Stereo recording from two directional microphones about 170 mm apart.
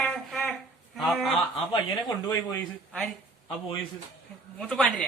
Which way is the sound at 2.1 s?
20° left (ahead or behind).